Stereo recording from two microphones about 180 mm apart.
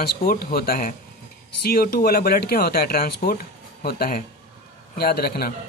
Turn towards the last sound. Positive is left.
turn(degrees=60)  # may be behind; listen again after turning